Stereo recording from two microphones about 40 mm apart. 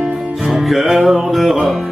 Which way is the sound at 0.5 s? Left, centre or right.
Centre.